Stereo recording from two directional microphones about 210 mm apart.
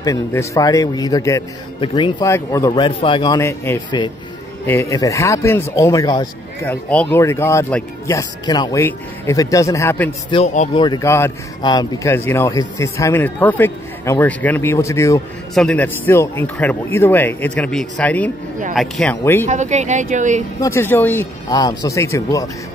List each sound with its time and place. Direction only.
0.0 s speech: 15° left (ahead or behind)
6.7 s speech: 5° left (ahead or behind)
10.3 s speech: 30° left (ahead or behind); by 15.2 s 15° left (ahead or behind)
15.5 s speech: 5° left (ahead or behind)
19.4 s speech: 35° right (ahead or behind)
20.6 s speech: 10° left (ahead or behind)